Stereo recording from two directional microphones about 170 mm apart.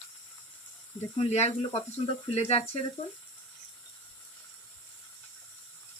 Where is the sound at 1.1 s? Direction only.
40° left (ahead or behind).